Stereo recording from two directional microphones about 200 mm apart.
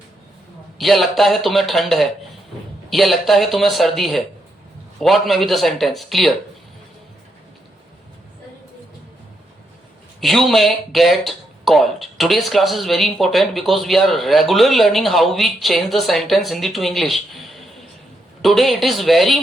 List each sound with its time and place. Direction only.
0.8 s speech: centre (ahead or behind)
10.2 s speech: centre (ahead or behind)